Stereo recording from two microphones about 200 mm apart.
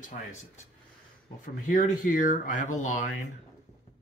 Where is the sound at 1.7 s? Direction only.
40° left (ahead or behind).